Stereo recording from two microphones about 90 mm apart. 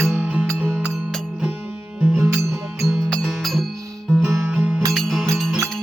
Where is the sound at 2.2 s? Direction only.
30° right (ahead or behind).